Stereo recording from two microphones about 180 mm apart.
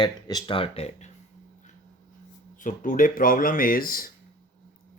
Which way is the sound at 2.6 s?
45° left (ahead or behind).